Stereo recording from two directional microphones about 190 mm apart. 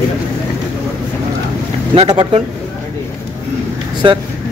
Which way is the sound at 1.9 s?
25° right (ahead or behind).